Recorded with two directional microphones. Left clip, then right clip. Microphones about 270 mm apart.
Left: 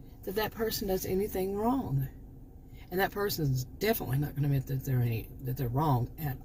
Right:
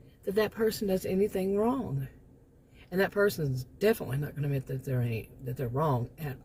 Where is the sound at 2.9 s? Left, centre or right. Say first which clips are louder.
Right 4 dB; centre.